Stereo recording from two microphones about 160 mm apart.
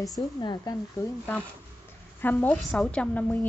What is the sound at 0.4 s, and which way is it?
Speech, 25° left (ahead or behind).